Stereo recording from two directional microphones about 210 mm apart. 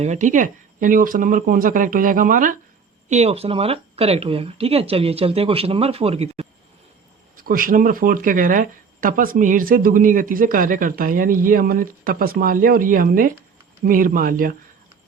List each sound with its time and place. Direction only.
0.0 s speech: 35° right (ahead or behind)
7.3 s speech: 40° right (ahead or behind)